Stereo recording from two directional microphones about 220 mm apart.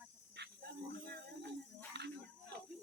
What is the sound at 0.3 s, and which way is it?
Dog, 50° right (ahead or behind).